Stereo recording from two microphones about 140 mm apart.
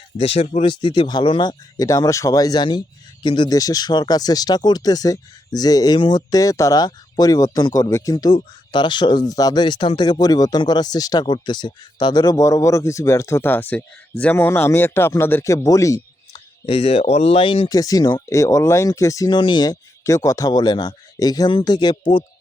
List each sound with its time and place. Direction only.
0.6 s speech: 35° left (ahead or behind)
16.6 s speech: 40° left (ahead or behind)
17.7 s speech: 25° left (ahead or behind)